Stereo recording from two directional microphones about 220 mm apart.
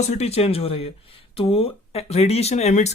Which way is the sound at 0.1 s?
30° left (ahead or behind).